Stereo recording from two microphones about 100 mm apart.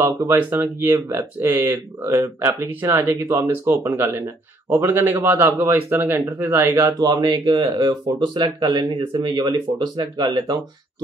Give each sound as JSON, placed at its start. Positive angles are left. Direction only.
{"t": 0.0, "sound": "speech", "side_deg": -30}